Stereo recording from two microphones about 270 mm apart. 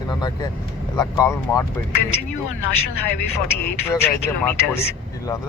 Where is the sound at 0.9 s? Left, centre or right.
Centre.